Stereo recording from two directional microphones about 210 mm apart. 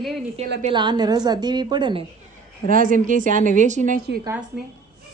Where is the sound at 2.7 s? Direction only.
40° right (ahead or behind).